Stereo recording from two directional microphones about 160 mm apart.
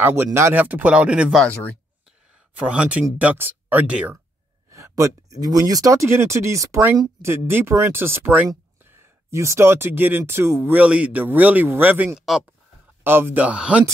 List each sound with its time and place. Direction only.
0.0 s speech: 15° right (ahead or behind)
1.4 s speech: 10° left (ahead or behind)
2.6 s speech: 5° right (ahead or behind)
4.6 s speech: 20° right (ahead or behind)